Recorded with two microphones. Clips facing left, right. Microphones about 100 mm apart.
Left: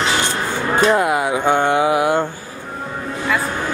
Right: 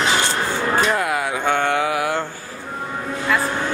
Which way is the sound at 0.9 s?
20° left (ahead or behind).